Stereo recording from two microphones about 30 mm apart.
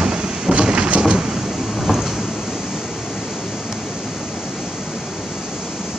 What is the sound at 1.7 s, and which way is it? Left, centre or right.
Sliding door, centre.